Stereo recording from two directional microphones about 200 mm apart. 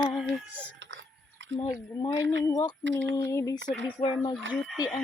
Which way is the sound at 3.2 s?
15° left (ahead or behind).